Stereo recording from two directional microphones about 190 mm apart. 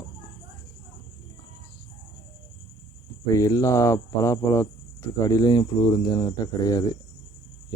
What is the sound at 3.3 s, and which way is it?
Speech, 15° left (ahead or behind).